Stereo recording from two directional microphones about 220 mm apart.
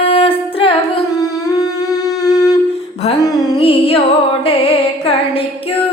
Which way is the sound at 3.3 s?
20° left (ahead or behind).